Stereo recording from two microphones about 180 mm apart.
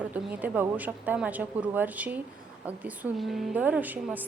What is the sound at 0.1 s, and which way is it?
A woman's voice, 10° right (ahead or behind).